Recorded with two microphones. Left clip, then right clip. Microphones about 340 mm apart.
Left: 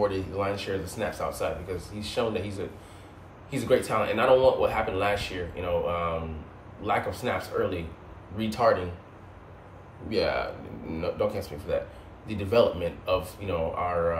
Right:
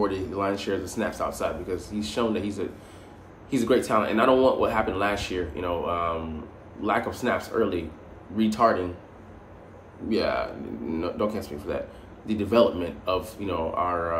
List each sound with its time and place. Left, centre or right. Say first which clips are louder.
0.0 s speech: right 1 dB; centre
10.0 s speech: right 1 dB; centre